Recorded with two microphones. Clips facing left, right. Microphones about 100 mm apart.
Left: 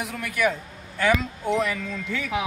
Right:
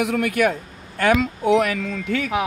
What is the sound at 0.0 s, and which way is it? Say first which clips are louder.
A man's voice: right 6 dB; 70° right (ahead or behind).